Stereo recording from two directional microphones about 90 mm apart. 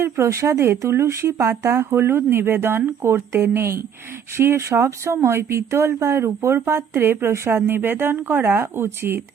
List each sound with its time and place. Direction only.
0.0 s speech: 35° right (ahead or behind)